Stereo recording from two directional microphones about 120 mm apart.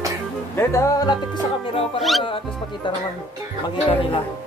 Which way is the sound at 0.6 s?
25° left (ahead or behind).